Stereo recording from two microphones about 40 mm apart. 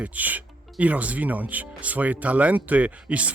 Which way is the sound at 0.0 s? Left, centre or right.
Right.